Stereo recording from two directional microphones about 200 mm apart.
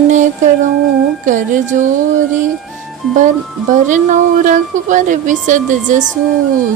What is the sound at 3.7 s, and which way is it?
A woman's voice, 40° right (ahead or behind).